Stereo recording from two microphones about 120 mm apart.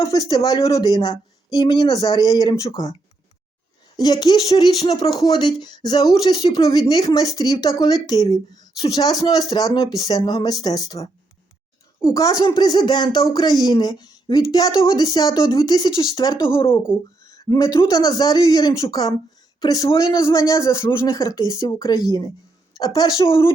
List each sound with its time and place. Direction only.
0.0 s a woman's voice: 30° left (ahead or behind)
3.9 s a woman's voice: 35° left (ahead or behind)
16.9 s a sound: 25° left (ahead or behind)
17.8 s a woman's voice: 30° left (ahead or behind)